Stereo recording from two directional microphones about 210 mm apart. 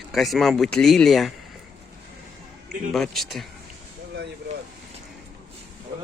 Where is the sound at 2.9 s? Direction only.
Centre (ahead or behind).